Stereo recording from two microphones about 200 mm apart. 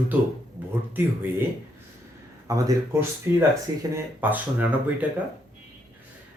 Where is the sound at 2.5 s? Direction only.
15° right (ahead or behind).